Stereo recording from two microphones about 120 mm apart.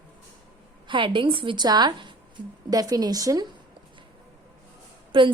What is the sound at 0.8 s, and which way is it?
A woman's voice, 40° right (ahead or behind).